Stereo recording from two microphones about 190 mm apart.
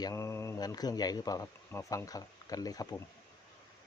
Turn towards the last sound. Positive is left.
turn(degrees=20)  # may be behind; listen again after turning